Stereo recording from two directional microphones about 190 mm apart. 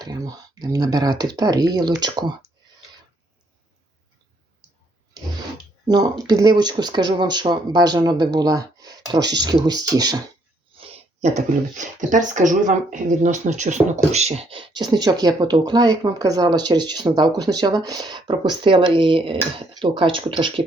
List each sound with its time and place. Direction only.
0.0 s speech: 20° right (ahead or behind)
5.9 s speech: 20° right (ahead or behind)
10.8 s speech: 35° right (ahead or behind)